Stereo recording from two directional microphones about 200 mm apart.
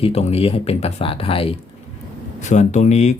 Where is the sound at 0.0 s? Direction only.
30° left (ahead or behind).